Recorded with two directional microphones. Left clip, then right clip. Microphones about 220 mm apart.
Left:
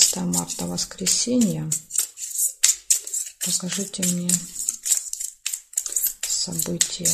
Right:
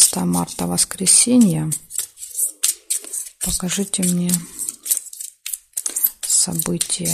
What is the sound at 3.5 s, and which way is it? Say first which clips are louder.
Speech: right 5 dB; 35° right (ahead or behind).